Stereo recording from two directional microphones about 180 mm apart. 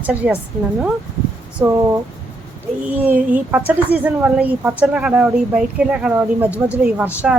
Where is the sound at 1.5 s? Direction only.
15° right (ahead or behind).